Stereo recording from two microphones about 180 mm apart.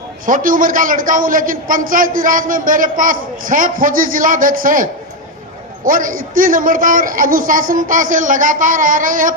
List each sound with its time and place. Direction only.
0.3 s a woman's voice: 50° right (ahead or behind)